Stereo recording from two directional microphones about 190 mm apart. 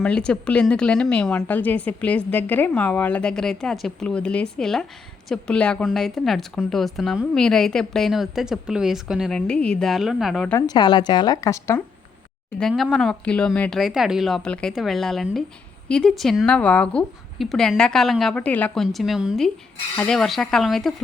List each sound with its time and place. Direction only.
0.0 s a woman's voice: 5° left (ahead or behind)
10.5 s speech: 20° left (ahead or behind)
12.5 s a woman's voice: centre (ahead or behind)